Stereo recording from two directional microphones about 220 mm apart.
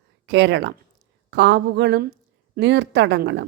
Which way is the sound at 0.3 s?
50° right (ahead or behind).